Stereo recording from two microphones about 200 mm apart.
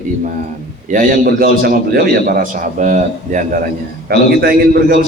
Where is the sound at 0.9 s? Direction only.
45° right (ahead or behind).